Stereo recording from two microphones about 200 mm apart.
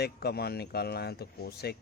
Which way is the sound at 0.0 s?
55° left (ahead or behind).